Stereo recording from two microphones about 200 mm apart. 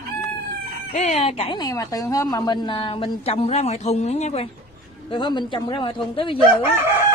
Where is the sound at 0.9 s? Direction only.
35° left (ahead or behind).